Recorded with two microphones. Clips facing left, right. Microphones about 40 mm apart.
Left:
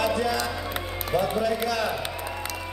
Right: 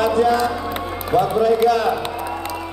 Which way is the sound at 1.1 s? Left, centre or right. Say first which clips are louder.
Right 8 dB; right.